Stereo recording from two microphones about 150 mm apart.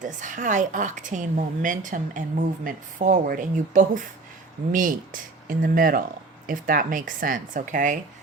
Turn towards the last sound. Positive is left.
turn(degrees=-60)  # may be behind; listen again after turning